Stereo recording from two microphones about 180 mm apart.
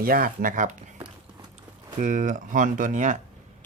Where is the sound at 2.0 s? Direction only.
45° right (ahead or behind).